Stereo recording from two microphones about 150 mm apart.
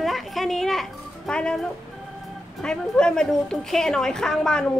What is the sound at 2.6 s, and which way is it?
A woman's voice, 5° left (ahead or behind).